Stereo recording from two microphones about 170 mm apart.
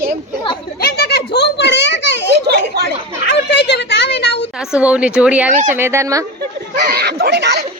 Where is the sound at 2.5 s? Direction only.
70° right (ahead or behind).